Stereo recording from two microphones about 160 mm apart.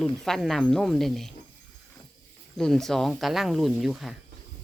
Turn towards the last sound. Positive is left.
turn(degrees=0)  # may be behind; listen again after turning